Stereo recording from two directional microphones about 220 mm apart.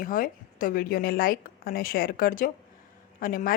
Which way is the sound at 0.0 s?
40° left (ahead or behind).